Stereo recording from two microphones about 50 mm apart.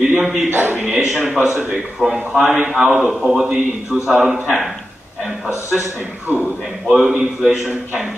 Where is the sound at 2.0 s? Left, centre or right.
Right.